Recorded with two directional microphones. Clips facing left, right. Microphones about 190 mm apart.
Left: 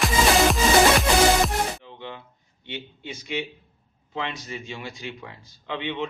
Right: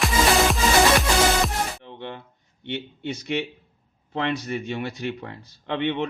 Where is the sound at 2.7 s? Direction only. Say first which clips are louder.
Right 6 dB; 60° right (ahead or behind).